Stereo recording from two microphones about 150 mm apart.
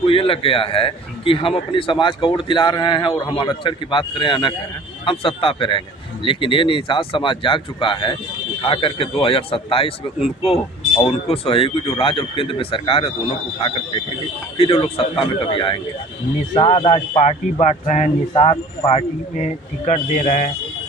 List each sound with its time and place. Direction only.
0.0 s a man's voice: 35° left (ahead or behind)
18.3 s speech: 35° left (ahead or behind); by 20.5 s 55° left (ahead or behind)